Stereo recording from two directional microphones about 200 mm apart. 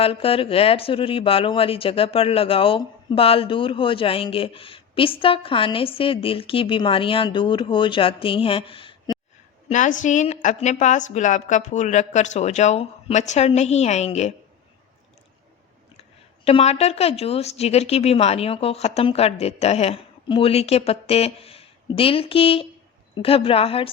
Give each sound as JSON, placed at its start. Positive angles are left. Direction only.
{"t": 0.0, "sound": "speech", "side_deg": 30}
{"t": 9.6, "sound": "speech", "side_deg": 40}
{"t": 16.4, "sound": "speech", "side_deg": 30}